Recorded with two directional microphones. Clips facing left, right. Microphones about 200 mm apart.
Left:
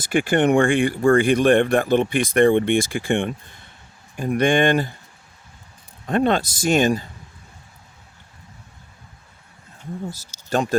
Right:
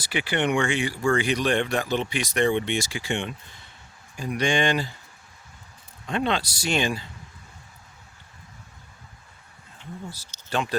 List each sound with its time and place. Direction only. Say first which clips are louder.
0.0 s speech: left 8 dB; 50° left (ahead or behind)
6.1 s speech: left 7 dB; 50° left (ahead or behind)
9.7 s speech: left 7 dB; 45° left (ahead or behind)